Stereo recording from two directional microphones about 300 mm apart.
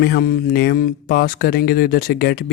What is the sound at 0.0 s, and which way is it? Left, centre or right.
Speech, left.